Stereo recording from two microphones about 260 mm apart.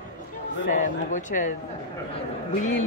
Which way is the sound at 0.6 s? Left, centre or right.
Left.